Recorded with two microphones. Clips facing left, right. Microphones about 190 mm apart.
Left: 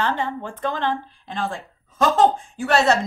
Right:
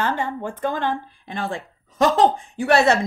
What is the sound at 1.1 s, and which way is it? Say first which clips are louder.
A woman's voice: even; 55° right (ahead or behind).